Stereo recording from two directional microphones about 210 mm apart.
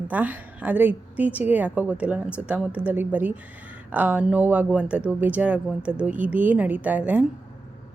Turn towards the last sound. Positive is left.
turn(degrees=-5)  # may be behind; listen again after turning